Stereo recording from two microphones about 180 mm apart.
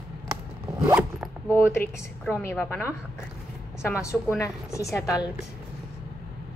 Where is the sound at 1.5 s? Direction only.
15° left (ahead or behind).